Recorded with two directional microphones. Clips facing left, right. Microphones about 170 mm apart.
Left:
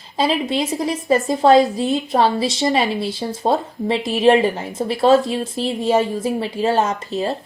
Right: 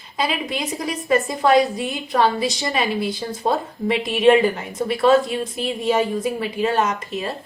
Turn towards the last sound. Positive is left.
turn(degrees=30)  # may be behind; listen again after turning